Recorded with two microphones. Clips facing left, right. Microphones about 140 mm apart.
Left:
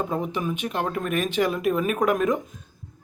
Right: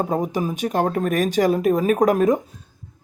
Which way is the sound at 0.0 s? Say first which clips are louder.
Right 4 dB; 40° right (ahead or behind).